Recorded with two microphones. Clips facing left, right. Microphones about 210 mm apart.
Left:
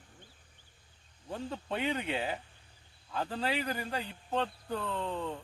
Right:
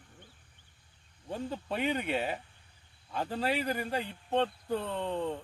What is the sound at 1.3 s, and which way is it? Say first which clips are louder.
Speech: right 1 dB; centre (ahead or behind).